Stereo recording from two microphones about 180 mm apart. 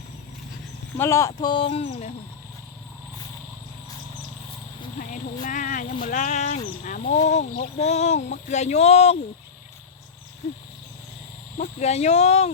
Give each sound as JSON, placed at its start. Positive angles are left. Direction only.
{"t": 0.9, "sound": "speech", "side_deg": 15}
{"t": 1.4, "sound": "speech", "side_deg": 25}
{"t": 4.9, "sound": "speech", "side_deg": 45}
{"t": 11.5, "sound": "speech", "side_deg": 40}